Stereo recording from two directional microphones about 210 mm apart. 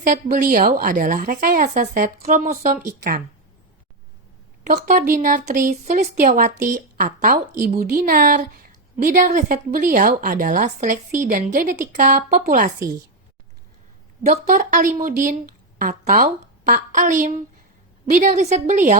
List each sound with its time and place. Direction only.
0.0 s a woman's voice: 40° right (ahead or behind)
4.6 s a woman's voice: 35° right (ahead or behind)
14.3 s a woman's voice: 45° right (ahead or behind)